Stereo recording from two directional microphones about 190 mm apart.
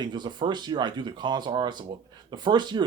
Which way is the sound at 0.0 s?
25° right (ahead or behind).